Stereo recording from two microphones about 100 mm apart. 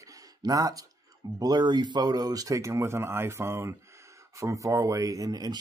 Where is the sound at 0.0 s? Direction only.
35° right (ahead or behind).